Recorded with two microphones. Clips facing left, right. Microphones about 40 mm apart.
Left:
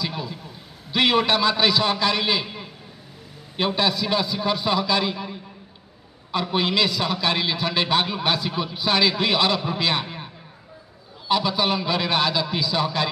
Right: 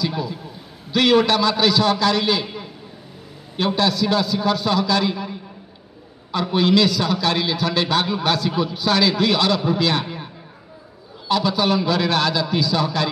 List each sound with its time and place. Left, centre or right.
0.0 s a man's voice: centre
2.4 s a sound: centre
3.5 s a man's voice: centre
6.5 s a man's voice: centre
11.2 s a man's voice: centre